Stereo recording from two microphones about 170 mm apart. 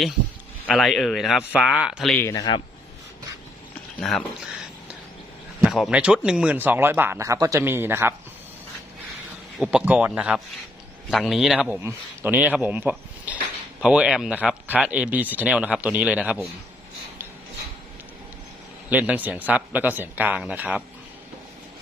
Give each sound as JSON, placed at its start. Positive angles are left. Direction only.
{"t": 0.7, "sound": "speech", "side_deg": 0}
{"t": 2.1, "sound": "a man's voice", "side_deg": 20}
{"t": 5.6, "sound": "speech", "side_deg": 0}
{"t": 9.6, "sound": "speech", "side_deg": -5}
{"t": 18.9, "sound": "speech", "side_deg": -10}